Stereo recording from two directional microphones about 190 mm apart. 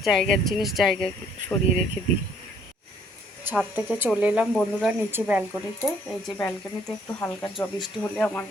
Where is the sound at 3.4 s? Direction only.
10° right (ahead or behind); by 8.4 s 5° left (ahead or behind).